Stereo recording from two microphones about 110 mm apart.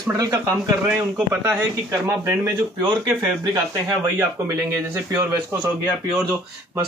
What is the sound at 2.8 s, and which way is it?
Speech, 35° right (ahead or behind).